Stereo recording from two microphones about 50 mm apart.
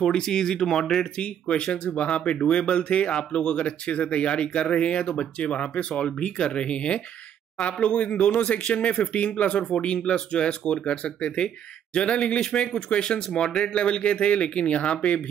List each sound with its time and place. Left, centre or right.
0.0 s speech: centre
1.2 s speech: left